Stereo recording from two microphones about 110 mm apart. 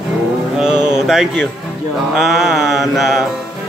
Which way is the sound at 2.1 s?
5° right (ahead or behind).